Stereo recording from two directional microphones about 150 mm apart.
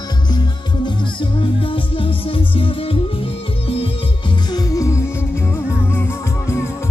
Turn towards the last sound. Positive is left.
turn(degrees=15)  # may be behind; listen again after turning